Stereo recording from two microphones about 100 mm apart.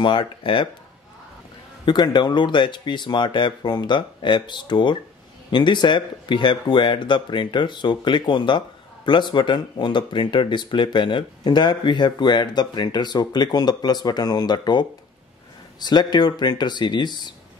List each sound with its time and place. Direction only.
0.0 s speech: 55° left (ahead or behind)
1.9 s speech: 50° left (ahead or behind)